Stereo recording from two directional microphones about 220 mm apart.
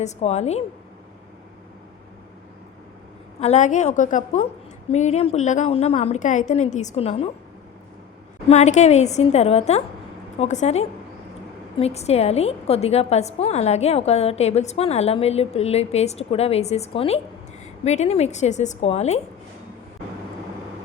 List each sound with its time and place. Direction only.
0.0 s a woman's voice: 30° left (ahead or behind)
3.4 s a woman's voice: 30° left (ahead or behind)
8.4 s a woman's voice: 30° left (ahead or behind)